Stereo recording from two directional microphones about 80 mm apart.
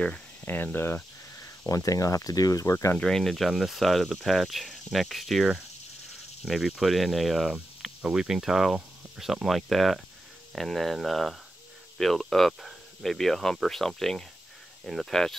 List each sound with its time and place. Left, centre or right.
0.5 s cricket: left
1.7 s speech: left
3.0 s speech: centre